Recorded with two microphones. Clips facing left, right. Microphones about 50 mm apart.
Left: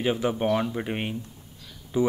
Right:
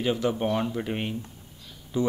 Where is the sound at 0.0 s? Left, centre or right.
Centre.